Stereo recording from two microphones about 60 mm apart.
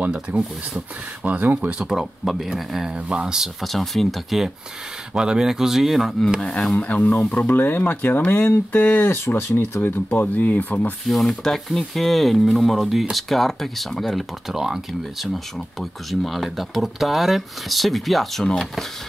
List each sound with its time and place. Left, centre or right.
0.3 s speech: right
1.7 s speech: centre
3.6 s speech: centre
5.1 s speech: centre
6.4 s speech: centre
6.8 s speech: left
10.2 s speech: left
11.1 s speech: centre